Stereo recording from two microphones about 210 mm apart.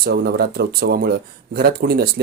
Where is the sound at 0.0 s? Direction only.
50° right (ahead or behind).